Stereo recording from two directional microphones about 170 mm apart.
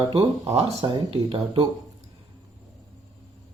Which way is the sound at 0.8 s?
30° right (ahead or behind).